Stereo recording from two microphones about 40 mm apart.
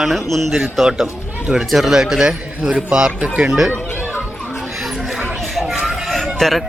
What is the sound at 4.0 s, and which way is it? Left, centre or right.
Children playing, left.